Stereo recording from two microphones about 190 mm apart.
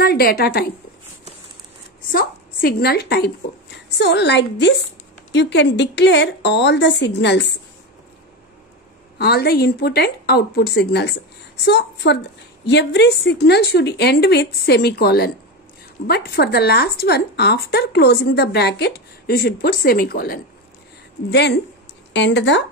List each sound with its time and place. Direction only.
0.0 s a woman's voice: 55° left (ahead or behind)
2.1 s a woman's voice: 50° left (ahead or behind)
9.2 s speech: 55° left (ahead or behind)
21.3 s a woman's voice: 65° left (ahead or behind)